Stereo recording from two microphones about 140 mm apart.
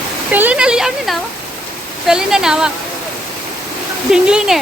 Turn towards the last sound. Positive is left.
turn(degrees=-5)  # may be behind; listen again after turning